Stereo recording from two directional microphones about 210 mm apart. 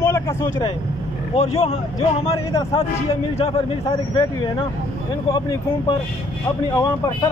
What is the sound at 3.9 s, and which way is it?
Speech, 15° left (ahead or behind).